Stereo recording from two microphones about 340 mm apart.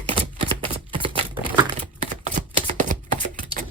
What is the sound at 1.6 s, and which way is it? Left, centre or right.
Typewriter, centre.